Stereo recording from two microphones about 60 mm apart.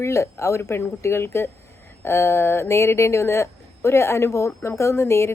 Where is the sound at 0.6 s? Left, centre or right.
Left.